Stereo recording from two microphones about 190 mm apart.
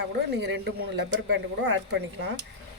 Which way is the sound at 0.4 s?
60° right (ahead or behind).